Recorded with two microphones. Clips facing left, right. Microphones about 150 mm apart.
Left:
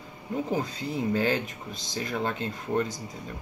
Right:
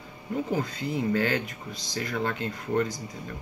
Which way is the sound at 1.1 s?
20° left (ahead or behind).